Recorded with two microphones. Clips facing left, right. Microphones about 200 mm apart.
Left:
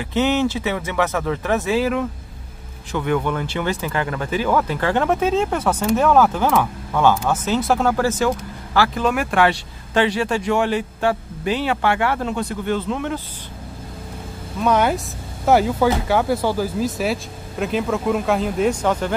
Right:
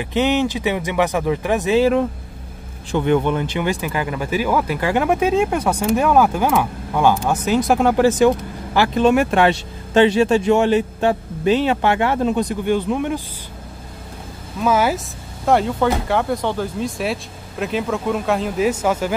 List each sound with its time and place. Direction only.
0.0 s speech: 15° right (ahead or behind)
14.6 s speech: 5° right (ahead or behind)